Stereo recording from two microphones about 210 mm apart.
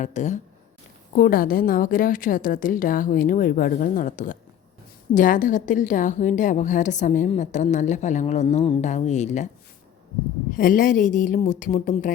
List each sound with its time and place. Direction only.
0.0 s a woman's voice: 35° left (ahead or behind)
10.6 s a woman's voice: 40° left (ahead or behind)